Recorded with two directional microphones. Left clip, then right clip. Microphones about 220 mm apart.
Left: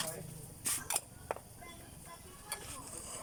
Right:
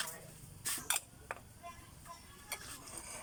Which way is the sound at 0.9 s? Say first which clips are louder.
Even; 25° left (ahead or behind).